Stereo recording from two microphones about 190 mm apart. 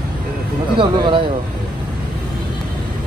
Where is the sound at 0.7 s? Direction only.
25° right (ahead or behind).